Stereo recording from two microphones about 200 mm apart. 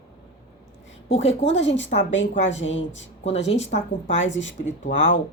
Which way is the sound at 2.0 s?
65° left (ahead or behind).